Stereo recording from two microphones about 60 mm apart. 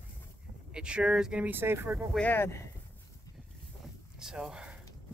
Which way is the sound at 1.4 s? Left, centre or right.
Right.